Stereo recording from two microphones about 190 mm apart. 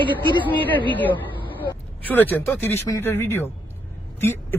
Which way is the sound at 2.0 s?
10° left (ahead or behind).